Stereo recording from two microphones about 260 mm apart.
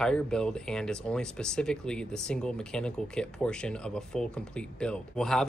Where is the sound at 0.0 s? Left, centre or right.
Centre.